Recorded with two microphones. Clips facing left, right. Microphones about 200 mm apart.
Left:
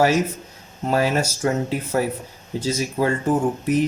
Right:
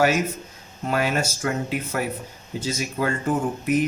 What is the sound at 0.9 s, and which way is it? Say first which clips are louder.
Speech: left 3 dB; 35° left (ahead or behind).